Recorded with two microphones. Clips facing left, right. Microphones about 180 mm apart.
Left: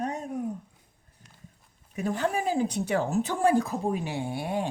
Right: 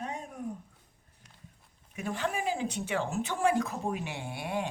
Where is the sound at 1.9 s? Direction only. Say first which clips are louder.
Left 5 dB; 40° left (ahead or behind).